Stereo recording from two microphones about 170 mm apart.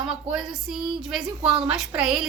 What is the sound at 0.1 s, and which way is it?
A woman's voice, 5° right (ahead or behind).